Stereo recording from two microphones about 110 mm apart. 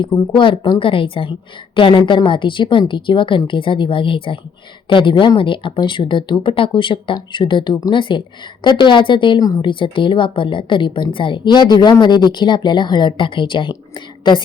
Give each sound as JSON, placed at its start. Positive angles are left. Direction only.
{"t": 0.3, "sound": "a woman's voice", "side_deg": 50}
{"t": 9.4, "sound": "speech", "side_deg": 35}
{"t": 9.6, "sound": "a woman's voice", "side_deg": 50}